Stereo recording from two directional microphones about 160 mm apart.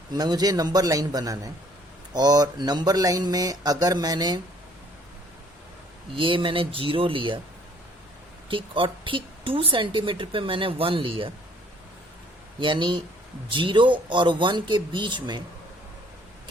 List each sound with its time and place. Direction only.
0.1 s speech: 25° right (ahead or behind)
6.1 s a woman's voice: 30° right (ahead or behind)
8.4 s a woman's voice: 30° right (ahead or behind)
12.5 s a woman's voice: 30° right (ahead or behind)